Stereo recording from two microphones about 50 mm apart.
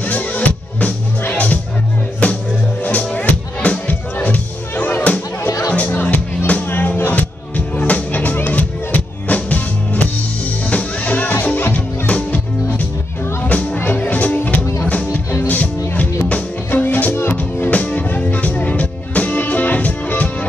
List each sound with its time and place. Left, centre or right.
0.0 s music: left
6.7 s music: left
13.7 s music: left
16.7 s music: left
17.1 s music: left
17.6 s music: left